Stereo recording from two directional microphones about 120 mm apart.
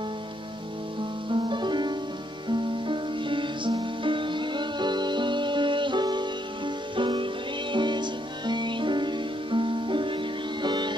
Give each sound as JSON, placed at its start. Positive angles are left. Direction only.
{"t": 1.3, "sound": "music", "side_deg": -40}